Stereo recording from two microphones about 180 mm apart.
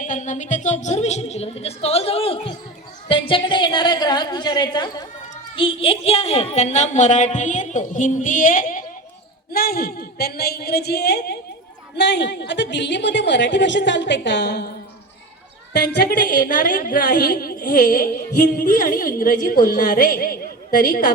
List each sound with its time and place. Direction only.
0.0 s a woman's voice: 45° left (ahead or behind); by 14.7 s 70° left (ahead or behind)
15.8 s a woman's voice: 55° left (ahead or behind)